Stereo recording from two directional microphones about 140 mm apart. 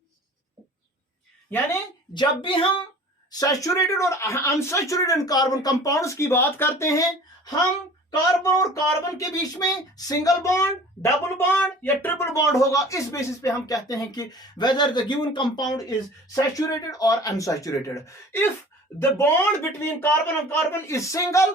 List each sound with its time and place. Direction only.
2.1 s speech: 35° left (ahead or behind)
3.3 s speech: 25° left (ahead or behind)
8.4 s speech: 25° left (ahead or behind)